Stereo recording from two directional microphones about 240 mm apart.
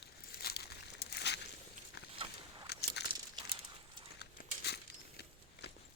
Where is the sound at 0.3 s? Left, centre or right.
Left.